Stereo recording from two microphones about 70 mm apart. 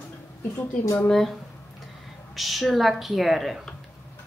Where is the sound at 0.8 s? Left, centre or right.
Left.